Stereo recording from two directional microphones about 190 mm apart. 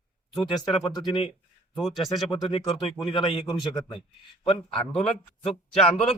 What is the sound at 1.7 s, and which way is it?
Speech, centre (ahead or behind).